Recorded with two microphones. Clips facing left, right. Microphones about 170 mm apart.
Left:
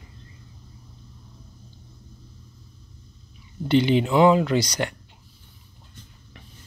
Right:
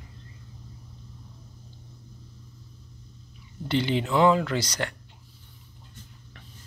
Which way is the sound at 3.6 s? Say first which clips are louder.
Left 6 dB; 15° left (ahead or behind).